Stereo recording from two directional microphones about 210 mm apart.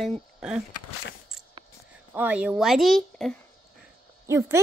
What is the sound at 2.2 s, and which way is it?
Speech, 5° right (ahead or behind).